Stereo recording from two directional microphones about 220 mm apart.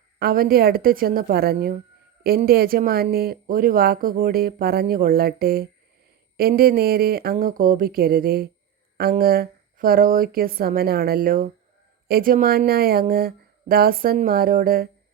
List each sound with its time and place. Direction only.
0.2 s speech: 45° right (ahead or behind)